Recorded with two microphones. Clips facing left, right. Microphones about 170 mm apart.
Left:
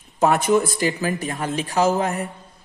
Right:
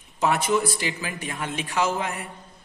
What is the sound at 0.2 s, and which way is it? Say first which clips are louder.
A man's voice: left 5 dB; 45° left (ahead or behind).